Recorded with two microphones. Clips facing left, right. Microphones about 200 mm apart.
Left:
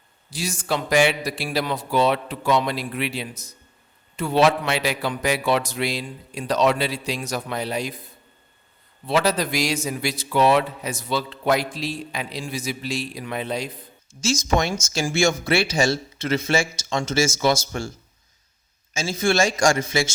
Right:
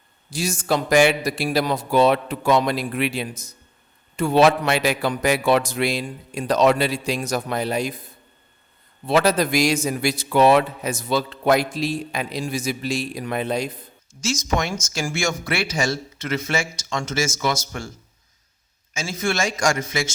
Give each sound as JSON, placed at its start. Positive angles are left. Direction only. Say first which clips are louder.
{"t": 0.3, "sound": "a man's voice", "louder": "right 3 dB", "side_deg": -45}
{"t": 9.0, "sound": "a man's voice", "louder": "right 3 dB", "side_deg": -50}
{"t": 14.2, "sound": "speech", "louder": "left 2 dB", "side_deg": 30}
{"t": 18.9, "sound": "a man's voice", "louder": "left 4 dB", "side_deg": 30}